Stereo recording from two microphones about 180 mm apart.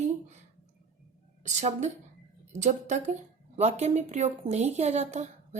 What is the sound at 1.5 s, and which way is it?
Speech, 40° right (ahead or behind).